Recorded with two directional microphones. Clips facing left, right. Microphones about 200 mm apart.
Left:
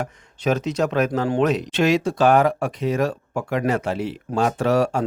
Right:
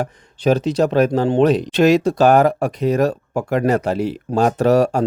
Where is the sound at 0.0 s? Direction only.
35° right (ahead or behind).